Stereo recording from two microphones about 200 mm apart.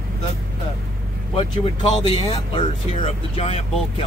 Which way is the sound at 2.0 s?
25° left (ahead or behind).